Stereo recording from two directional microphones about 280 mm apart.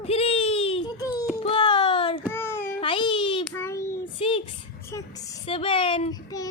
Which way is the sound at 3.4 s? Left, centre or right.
Centre.